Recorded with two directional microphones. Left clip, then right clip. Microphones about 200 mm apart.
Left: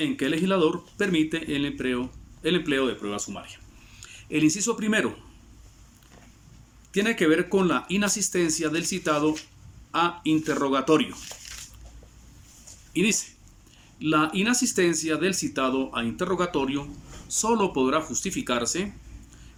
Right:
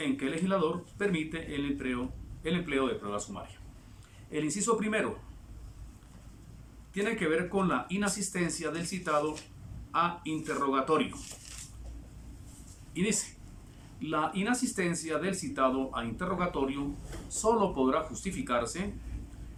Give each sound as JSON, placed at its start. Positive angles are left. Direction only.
{"t": 0.0, "sound": "speech", "side_deg": 20}
{"t": 6.9, "sound": "speech", "side_deg": 20}
{"t": 11.1, "sound": "speech", "side_deg": 45}
{"t": 12.9, "sound": "speech", "side_deg": 15}